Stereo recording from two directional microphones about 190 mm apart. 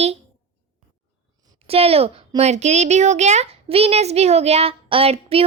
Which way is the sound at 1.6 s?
30° right (ahead or behind).